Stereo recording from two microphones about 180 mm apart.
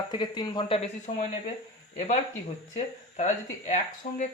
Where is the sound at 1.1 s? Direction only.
45° left (ahead or behind).